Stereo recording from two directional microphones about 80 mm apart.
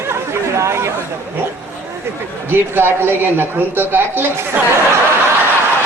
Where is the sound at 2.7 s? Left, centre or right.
Right.